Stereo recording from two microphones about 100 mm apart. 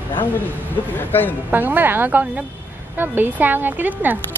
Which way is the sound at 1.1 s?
20° left (ahead or behind).